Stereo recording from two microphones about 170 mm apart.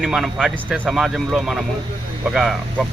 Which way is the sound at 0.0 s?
Centre (ahead or behind).